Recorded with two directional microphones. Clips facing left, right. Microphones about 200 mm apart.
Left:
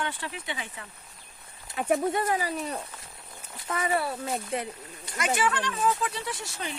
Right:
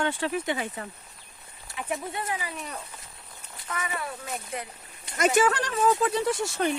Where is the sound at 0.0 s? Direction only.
45° right (ahead or behind).